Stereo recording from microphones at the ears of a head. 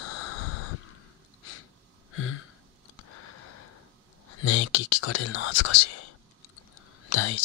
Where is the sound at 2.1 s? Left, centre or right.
Left.